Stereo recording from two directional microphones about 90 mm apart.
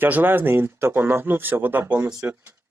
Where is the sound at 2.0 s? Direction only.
30° right (ahead or behind).